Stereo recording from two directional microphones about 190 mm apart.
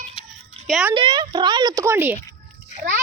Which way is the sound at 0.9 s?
25° right (ahead or behind).